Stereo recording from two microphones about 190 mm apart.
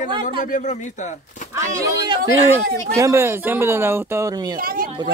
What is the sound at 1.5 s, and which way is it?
Speech, 15° right (ahead or behind).